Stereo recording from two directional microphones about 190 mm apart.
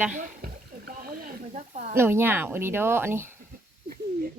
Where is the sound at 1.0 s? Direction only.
45° right (ahead or behind).